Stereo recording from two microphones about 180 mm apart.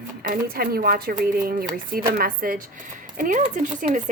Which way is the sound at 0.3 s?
55° right (ahead or behind).